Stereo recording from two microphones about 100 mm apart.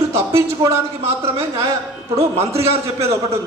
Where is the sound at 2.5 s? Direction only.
90° right.